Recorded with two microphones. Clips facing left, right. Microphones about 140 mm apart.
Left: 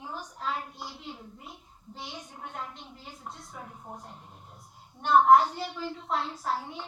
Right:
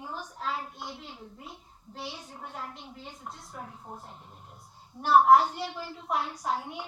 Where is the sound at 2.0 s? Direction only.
15° left (ahead or behind).